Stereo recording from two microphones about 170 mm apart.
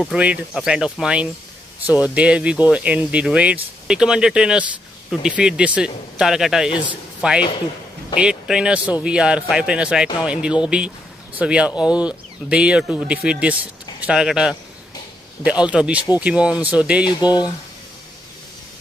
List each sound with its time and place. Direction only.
0.0 s a man's voice: 5° right (ahead or behind)
6.7 s speech: 30° left (ahead or behind)
7.2 s a man's voice: 5° right (ahead or behind)
17.0 s speech: 25° left (ahead or behind)